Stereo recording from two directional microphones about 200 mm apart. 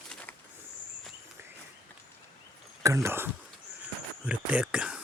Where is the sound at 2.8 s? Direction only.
15° right (ahead or behind).